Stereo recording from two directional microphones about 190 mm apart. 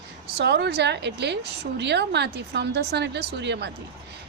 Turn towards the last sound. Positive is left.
turn(degrees=-65)  # may be behind; listen again after turning